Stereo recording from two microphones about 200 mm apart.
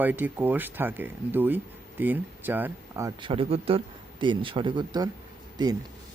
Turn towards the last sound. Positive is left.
turn(degrees=-20)  # may be behind; listen again after turning